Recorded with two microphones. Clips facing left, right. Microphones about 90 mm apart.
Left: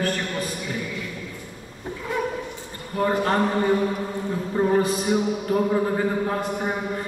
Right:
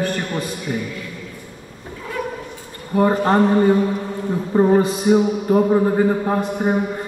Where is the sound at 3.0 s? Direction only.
25° right (ahead or behind).